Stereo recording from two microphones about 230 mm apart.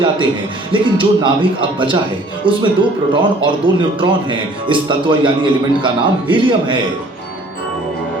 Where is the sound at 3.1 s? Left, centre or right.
Right.